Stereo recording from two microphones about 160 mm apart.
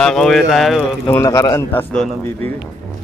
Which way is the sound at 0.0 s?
5° left (ahead or behind).